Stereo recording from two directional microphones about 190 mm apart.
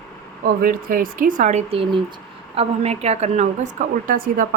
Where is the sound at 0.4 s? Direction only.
50° right (ahead or behind).